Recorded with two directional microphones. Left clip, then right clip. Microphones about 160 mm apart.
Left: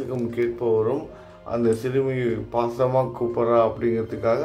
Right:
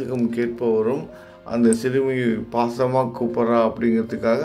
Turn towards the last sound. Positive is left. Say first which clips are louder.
# right 2 dB
turn(degrees=-30)  # may be behind; listen again after turning